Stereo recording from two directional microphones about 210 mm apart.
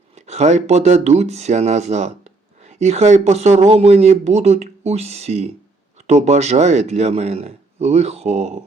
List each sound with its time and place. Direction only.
0.3 s speech: 30° right (ahead or behind)